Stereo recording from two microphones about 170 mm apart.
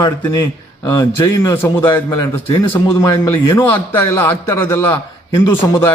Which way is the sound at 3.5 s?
15° left (ahead or behind).